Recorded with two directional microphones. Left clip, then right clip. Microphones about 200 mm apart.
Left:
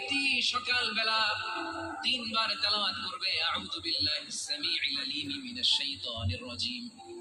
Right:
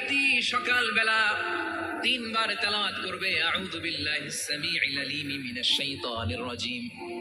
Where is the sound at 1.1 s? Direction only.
15° right (ahead or behind).